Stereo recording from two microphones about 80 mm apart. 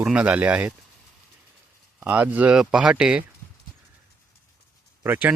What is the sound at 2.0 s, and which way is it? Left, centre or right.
Speech, centre.